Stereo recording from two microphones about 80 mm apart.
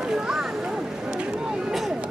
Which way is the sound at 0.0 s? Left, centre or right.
Centre.